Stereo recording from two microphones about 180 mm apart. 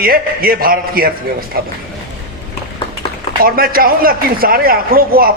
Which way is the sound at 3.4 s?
55° right (ahead or behind).